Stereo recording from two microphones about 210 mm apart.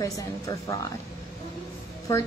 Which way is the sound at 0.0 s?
15° left (ahead or behind).